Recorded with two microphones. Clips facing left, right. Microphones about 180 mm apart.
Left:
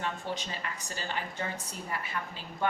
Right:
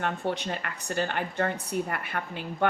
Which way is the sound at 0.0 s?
60° right (ahead or behind).